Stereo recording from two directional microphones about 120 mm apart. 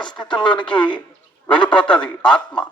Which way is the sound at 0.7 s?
40° left (ahead or behind).